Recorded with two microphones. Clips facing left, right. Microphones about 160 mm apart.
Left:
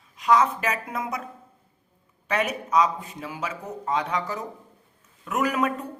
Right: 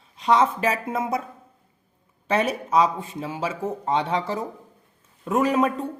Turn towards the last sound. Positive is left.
turn(degrees=-25)  # may be behind; listen again after turning